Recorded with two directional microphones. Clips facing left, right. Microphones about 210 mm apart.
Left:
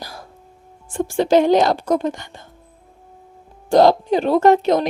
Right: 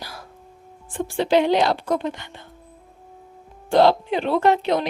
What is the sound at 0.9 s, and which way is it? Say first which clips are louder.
A woman's voice: left 4 dB; 45° left (ahead or behind).